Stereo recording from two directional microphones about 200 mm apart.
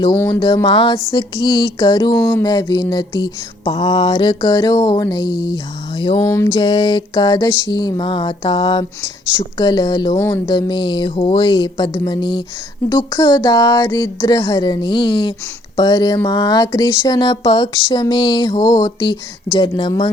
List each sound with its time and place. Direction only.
0.0 s mantra: 15° left (ahead or behind)